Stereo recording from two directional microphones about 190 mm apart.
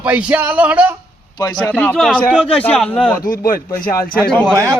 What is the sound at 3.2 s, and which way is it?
Speech, 50° left (ahead or behind).